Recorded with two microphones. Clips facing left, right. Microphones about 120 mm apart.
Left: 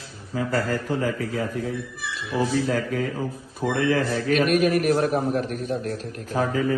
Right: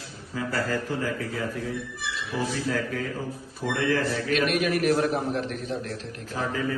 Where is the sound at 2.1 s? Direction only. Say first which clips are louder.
Left 6 dB; 45° left (ahead or behind).